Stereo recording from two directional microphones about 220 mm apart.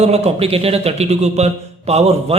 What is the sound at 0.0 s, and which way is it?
A man's voice, 30° right (ahead or behind).